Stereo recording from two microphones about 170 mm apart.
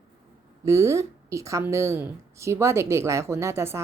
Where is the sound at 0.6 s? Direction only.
15° right (ahead or behind).